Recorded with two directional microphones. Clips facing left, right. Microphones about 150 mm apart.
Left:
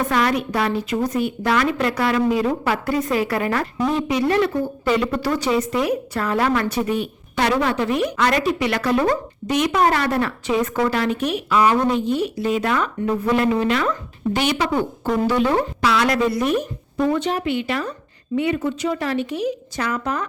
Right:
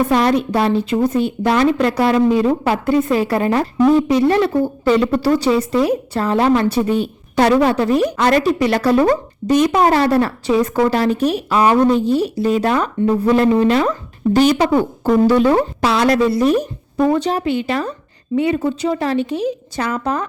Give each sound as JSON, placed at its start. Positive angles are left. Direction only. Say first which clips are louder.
{"t": 0.1, "sound": "a woman's voice", "louder": "right 5 dB", "side_deg": -30}